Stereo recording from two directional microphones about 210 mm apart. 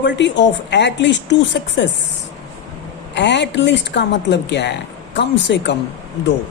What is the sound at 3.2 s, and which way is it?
A woman's voice, 55° left (ahead or behind).